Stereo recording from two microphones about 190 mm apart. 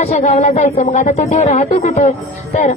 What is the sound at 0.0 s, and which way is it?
A woman's voice, 35° left (ahead or behind).